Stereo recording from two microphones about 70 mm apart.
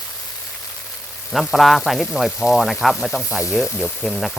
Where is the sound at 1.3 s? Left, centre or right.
Centre.